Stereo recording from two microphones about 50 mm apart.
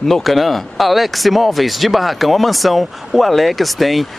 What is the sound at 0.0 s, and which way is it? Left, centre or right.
Speech, centre.